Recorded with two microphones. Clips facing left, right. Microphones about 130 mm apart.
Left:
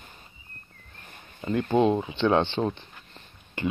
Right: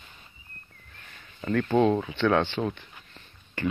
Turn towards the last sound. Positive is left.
turn(degrees=25)  # may be behind; listen again after turning